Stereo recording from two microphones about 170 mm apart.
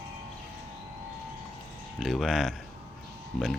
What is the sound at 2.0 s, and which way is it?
Speech, centre (ahead or behind).